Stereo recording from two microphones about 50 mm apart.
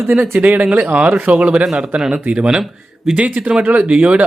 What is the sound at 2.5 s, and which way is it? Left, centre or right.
Speech, centre.